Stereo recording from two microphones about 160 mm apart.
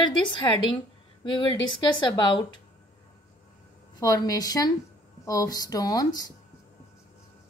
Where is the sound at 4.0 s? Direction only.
20° left (ahead or behind).